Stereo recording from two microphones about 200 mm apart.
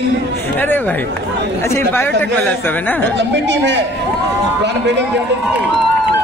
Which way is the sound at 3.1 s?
60° right (ahead or behind).